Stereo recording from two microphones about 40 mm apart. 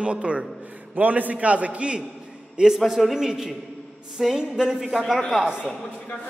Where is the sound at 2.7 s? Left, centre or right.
Centre.